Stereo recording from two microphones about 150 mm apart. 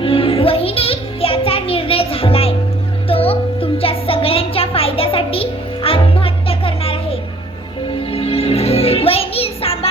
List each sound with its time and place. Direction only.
0.0 s music: 40° left (ahead or behind)